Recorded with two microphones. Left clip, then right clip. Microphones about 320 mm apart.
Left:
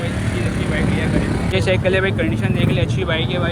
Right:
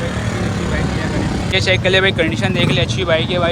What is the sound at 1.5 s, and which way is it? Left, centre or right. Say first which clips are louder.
Speech: right 4 dB; centre.